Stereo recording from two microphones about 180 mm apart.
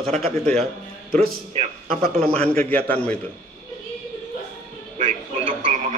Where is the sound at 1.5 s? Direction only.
35° right (ahead or behind).